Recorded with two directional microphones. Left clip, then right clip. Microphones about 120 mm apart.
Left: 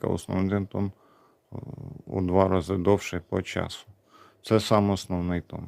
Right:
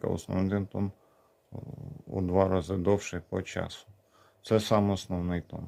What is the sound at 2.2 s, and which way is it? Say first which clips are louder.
Speech: left 3 dB; 40° left (ahead or behind).